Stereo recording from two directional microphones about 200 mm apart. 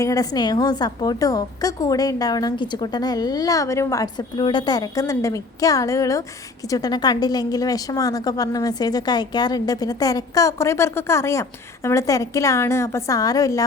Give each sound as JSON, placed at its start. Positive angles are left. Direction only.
{"t": 0.0, "sound": "a woman's voice", "side_deg": 15}